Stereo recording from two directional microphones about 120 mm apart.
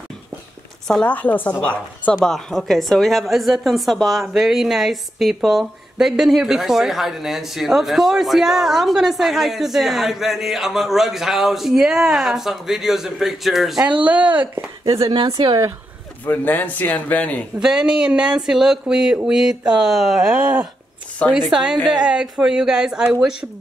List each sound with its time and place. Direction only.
0.8 s a woman's voice: 10° left (ahead or behind); by 14.6 s 15° right (ahead or behind)
14.9 s speech: 40° right (ahead or behind)
16.3 s speech: 15° left (ahead or behind)
17.6 s a woman's voice: 5° right (ahead or behind)